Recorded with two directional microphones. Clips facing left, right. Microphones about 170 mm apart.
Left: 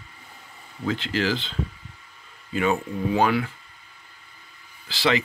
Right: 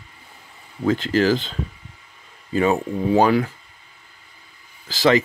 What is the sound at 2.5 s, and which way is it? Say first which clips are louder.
Speech: right 4 dB; 35° right (ahead or behind).